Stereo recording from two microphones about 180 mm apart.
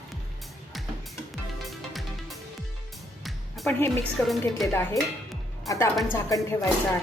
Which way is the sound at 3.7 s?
15° left (ahead or behind).